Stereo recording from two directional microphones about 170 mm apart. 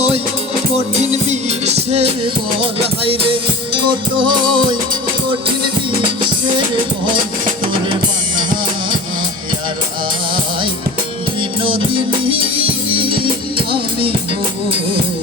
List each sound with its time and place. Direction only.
1.1 s music: 40° right (ahead or behind)
7.6 s drum kit: 30° right (ahead or behind)
12.2 s music: 30° right (ahead or behind)